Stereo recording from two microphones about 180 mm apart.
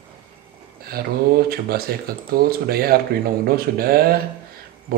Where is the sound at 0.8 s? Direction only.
55° right (ahead or behind).